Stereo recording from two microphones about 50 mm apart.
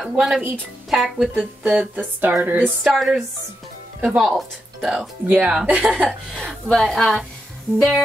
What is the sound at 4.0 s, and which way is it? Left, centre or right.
Speech, centre.